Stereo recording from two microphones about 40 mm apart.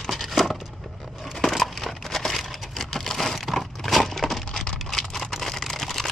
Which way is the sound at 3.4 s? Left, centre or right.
Centre.